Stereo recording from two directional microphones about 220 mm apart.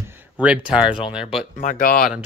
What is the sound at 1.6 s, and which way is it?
Speech, 40° left (ahead or behind).